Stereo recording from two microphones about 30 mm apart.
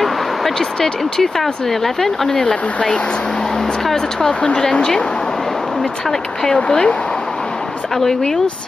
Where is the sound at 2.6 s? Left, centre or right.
Left.